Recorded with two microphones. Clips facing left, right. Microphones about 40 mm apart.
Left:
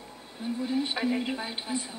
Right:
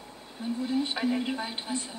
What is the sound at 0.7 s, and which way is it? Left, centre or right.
A woman's voice, centre.